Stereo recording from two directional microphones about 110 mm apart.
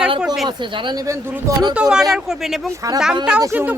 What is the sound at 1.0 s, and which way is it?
Speech, 30° right (ahead or behind).